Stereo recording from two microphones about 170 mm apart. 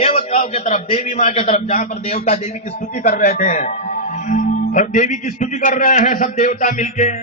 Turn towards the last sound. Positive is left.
turn(degrees=45)  # may be behind; listen again after turning